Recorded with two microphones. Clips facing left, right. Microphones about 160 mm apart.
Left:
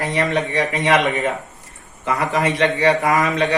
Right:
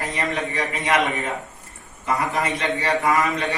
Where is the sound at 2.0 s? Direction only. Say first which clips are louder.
Left 4 dB; 90° left.